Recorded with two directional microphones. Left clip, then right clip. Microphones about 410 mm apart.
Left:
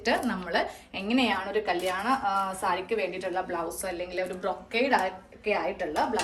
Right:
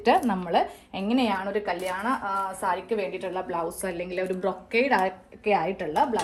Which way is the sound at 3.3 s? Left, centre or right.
Centre.